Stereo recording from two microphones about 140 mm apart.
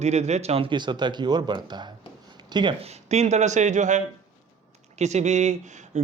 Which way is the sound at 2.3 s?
30° right (ahead or behind).